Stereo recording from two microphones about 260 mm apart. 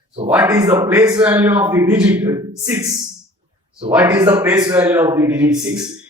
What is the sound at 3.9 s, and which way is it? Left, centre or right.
A man's voice, centre.